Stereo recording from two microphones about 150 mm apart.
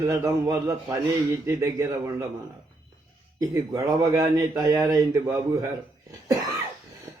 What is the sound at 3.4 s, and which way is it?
A man's voice, 25° right (ahead or behind).